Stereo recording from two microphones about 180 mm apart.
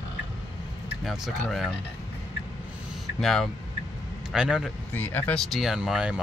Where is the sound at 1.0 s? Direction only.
Centre (ahead or behind).